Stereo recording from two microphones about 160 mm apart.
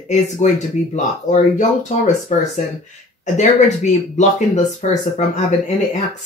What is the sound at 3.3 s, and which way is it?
Speech, 45° left (ahead or behind).